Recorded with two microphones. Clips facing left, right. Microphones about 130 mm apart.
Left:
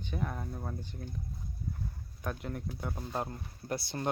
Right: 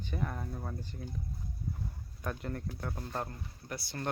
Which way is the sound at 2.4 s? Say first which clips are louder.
Even; 10° left (ahead or behind).